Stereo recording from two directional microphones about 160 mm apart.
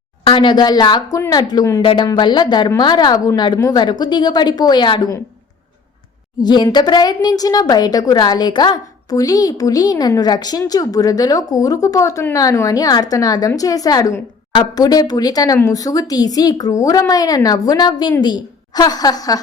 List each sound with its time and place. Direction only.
0.3 s a woman's voice: 30° left (ahead or behind)
6.4 s a woman's voice: 25° left (ahead or behind)